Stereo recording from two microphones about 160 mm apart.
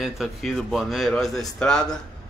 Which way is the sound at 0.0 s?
Centre (ahead or behind).